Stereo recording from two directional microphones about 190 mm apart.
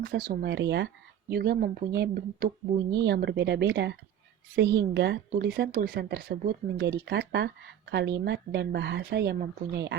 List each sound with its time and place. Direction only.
0.0 s speech: 60° right (ahead or behind)
1.3 s speech: 55° right (ahead or behind)